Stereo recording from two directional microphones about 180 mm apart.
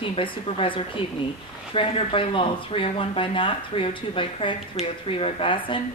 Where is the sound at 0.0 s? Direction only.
30° left (ahead or behind).